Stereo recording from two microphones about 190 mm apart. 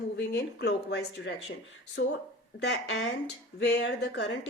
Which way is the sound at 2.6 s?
70° left (ahead or behind).